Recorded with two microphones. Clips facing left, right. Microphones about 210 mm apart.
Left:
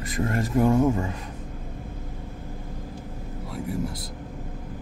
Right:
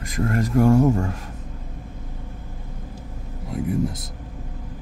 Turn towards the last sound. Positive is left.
turn(degrees=-20)  # may be behind; listen again after turning